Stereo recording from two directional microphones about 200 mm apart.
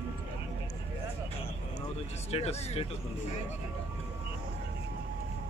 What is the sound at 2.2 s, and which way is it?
Speech, 30° left (ahead or behind).